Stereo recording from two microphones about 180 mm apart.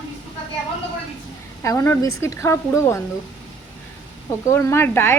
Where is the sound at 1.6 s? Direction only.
15° left (ahead or behind).